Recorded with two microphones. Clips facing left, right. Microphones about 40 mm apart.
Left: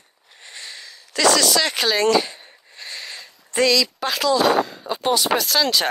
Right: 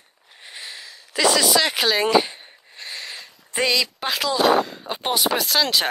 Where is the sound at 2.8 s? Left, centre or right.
Centre.